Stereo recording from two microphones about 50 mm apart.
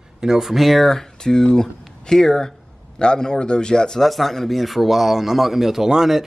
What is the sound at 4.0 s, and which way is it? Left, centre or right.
Speech, centre.